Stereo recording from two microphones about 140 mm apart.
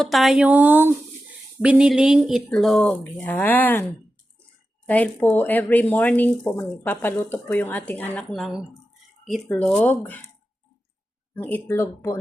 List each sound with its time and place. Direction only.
0.0 s speech: centre (ahead or behind)
8.3 s speech: centre (ahead or behind)
11.5 s speech: 15° left (ahead or behind)